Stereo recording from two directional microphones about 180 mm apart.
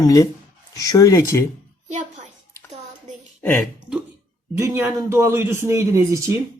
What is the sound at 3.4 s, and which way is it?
Speech, 10° left (ahead or behind).